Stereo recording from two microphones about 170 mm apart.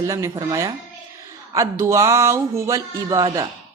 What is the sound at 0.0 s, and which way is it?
A woman's voice, 20° right (ahead or behind).